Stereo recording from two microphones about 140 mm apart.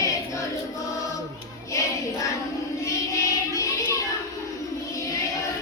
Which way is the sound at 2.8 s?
25° left (ahead or behind).